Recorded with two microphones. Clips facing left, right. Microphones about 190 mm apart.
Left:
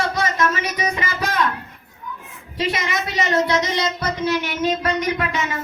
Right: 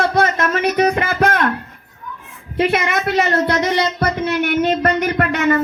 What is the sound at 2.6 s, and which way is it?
Speech, 55° right (ahead or behind).